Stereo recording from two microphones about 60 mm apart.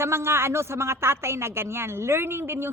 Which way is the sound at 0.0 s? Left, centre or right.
Right.